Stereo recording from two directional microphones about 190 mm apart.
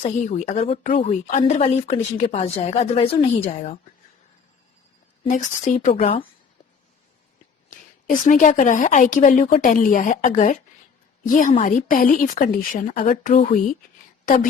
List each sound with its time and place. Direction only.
0.0 s a woman's voice: 35° left (ahead or behind)
5.3 s a woman's voice: 40° left (ahead or behind)
7.7 s a woman's voice: 45° left (ahead or behind)